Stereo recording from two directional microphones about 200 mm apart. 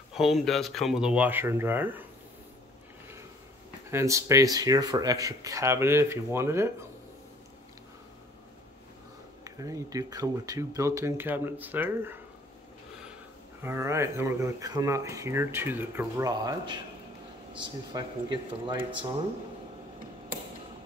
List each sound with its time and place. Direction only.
0.1 s speech: centre (ahead or behind)
3.9 s speech: 15° right (ahead or behind)
9.4 s speech: 15° right (ahead or behind)
13.6 s speech: 15° right (ahead or behind)